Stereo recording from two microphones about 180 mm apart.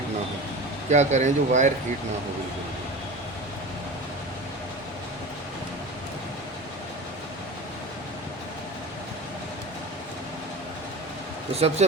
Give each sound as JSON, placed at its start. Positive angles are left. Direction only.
{"t": 0.9, "sound": "speech", "side_deg": -40}
{"t": 11.8, "sound": "speech", "side_deg": -40}